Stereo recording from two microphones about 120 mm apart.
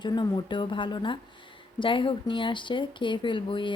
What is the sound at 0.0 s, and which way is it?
Speech, 40° left (ahead or behind).